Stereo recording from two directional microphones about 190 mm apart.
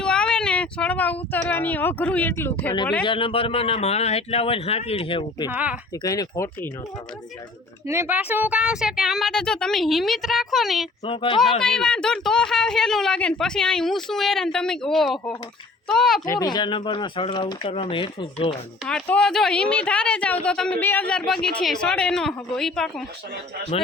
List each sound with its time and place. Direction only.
0.0 s speech: 5° left (ahead or behind)
3.0 s a man's voice: 25° left (ahead or behind)
5.5 s speech: 10° right (ahead or behind)
5.9 s speech: 20° left (ahead or behind)
7.9 s speech: 10° right (ahead or behind)
11.0 s speech: 25° left (ahead or behind)
11.6 s speech: 5° left (ahead or behind)
16.2 s speech: 20° left (ahead or behind)
18.9 s speech: 5° left (ahead or behind)